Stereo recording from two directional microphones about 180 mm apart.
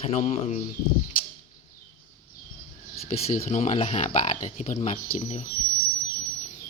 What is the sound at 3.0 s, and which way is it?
Speech, 40° left (ahead or behind).